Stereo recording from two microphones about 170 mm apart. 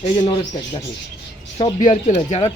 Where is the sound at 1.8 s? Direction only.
45° left (ahead or behind).